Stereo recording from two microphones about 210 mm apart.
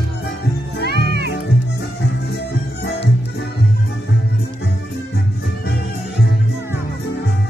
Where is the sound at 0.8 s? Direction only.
50° right (ahead or behind).